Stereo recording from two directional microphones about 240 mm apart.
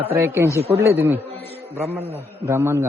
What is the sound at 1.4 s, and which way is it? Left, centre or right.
Music, right.